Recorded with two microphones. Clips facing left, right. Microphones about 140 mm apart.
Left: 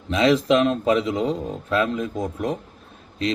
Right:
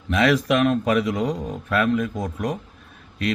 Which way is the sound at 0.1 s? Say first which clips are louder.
Left 2 dB; 25° left (ahead or behind).